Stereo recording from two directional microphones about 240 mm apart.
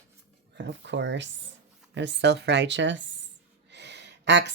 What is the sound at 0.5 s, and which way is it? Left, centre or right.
Speech, right.